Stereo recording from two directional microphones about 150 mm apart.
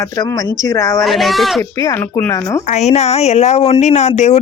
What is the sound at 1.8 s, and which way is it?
Speech, 15° left (ahead or behind).